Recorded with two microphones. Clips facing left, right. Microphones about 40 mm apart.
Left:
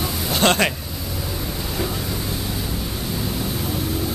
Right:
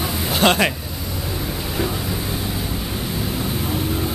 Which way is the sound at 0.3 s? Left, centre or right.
Centre.